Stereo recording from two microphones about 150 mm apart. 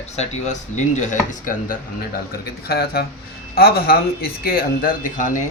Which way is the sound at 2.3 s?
90° left.